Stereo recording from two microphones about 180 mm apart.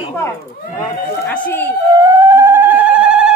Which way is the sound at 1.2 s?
10° left (ahead or behind).